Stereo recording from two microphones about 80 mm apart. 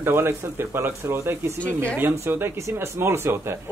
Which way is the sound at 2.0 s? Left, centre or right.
Right.